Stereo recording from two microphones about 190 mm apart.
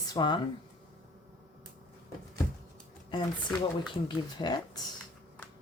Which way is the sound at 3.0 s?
25° left (ahead or behind).